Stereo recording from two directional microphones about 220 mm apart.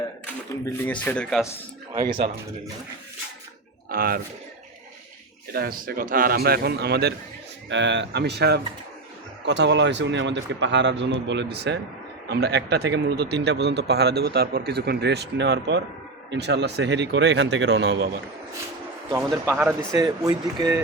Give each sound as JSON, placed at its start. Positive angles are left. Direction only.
{"t": 0.6, "sound": "speech", "side_deg": 10}
{"t": 1.9, "sound": "speech", "side_deg": -20}
{"t": 3.8, "sound": "speech", "side_deg": -40}
{"t": 5.5, "sound": "a man's voice", "side_deg": -45}
{"t": 19.1, "sound": "speech", "side_deg": -10}